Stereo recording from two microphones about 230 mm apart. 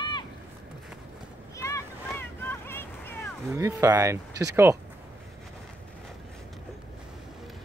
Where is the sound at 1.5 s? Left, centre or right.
Centre.